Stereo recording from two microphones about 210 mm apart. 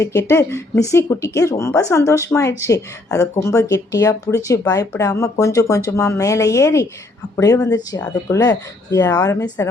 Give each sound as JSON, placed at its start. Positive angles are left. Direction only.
{"t": 0.0, "sound": "speech", "side_deg": 10}